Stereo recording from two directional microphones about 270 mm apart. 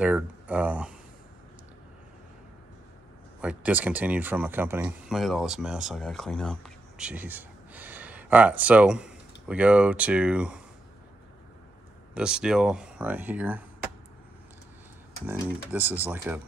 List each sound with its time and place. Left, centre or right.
0.0 s speech: centre
3.3 s speech: centre
12.1 s speech: centre
15.2 s speech: centre